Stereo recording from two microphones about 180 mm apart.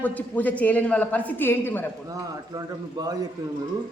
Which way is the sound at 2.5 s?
20° right (ahead or behind).